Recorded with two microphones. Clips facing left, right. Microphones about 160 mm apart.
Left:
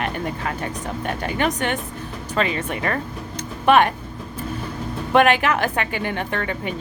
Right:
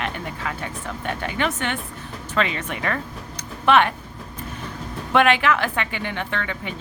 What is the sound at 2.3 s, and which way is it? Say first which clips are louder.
Speech: left 2 dB; 40° left (ahead or behind).